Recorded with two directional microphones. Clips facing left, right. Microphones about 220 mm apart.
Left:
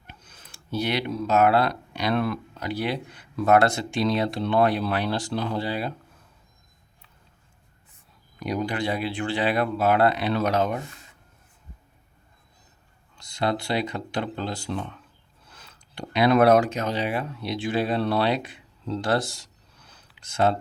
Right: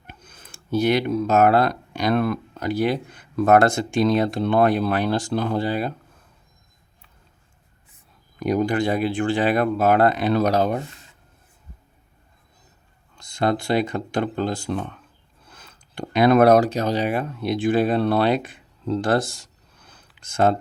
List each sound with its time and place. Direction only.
0.1 s speech: 50° right (ahead or behind)
8.4 s speech: 50° right (ahead or behind)
13.1 s speech: 50° right (ahead or behind)